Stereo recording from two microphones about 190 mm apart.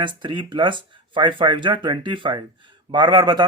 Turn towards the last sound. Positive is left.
turn(degrees=-20)  # may be behind; listen again after turning